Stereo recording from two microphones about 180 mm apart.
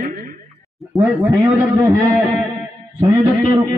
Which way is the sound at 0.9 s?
Centre (ahead or behind).